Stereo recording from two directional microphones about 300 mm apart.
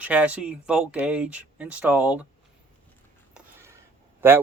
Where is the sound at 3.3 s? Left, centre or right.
Centre.